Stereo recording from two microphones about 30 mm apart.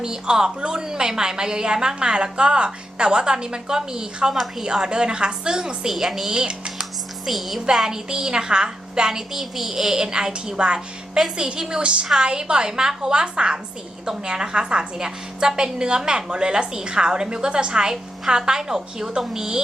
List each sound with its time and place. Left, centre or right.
0.0 s a woman's voice: right
6.0 s a woman's voice: centre
6.2 s a woman's voice: right
7.3 s a woman's voice: centre
7.9 s a woman's voice: right
9.9 s a woman's voice: right
12.2 s a woman's voice: right